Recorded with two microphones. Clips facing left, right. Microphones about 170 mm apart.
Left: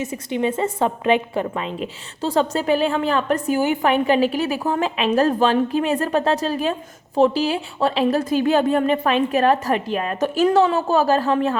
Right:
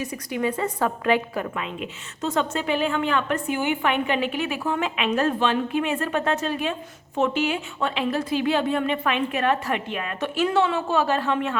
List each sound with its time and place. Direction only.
0.0 s a woman's voice: 25° left (ahead or behind)